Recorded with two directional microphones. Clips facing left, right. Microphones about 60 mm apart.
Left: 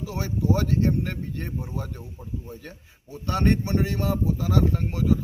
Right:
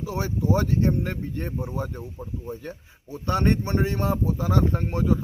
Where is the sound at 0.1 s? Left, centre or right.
Right.